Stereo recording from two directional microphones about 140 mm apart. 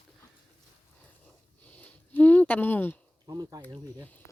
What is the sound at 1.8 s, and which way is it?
Speech, 10° left (ahead or behind).